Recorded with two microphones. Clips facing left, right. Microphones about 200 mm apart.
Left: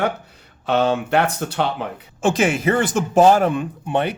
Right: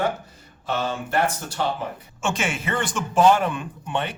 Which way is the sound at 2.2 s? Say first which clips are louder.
Left 9 dB; 35° left (ahead or behind).